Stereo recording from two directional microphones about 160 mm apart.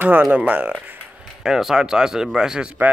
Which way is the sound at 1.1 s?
5° right (ahead or behind).